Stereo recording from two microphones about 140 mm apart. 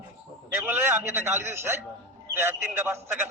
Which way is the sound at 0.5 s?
15° right (ahead or behind).